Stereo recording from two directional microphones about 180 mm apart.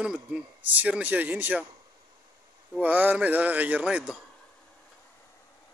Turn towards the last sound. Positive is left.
turn(degrees=-5)  # may be behind; listen again after turning